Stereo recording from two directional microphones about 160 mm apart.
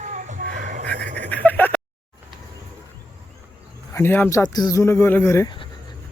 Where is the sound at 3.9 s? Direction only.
15° left (ahead or behind).